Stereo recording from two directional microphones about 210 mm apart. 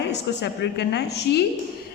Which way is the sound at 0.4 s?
55° left (ahead or behind).